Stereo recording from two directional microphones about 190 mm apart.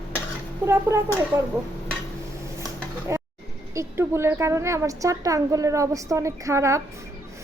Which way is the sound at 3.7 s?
15° right (ahead or behind).